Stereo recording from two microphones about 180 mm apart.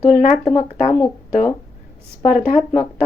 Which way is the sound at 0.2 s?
45° left (ahead or behind).